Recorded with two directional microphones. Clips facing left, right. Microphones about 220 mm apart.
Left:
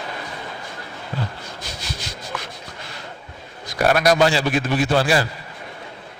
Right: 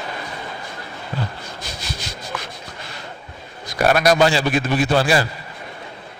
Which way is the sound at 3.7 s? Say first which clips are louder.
Right 1 dB; 20° right (ahead or behind).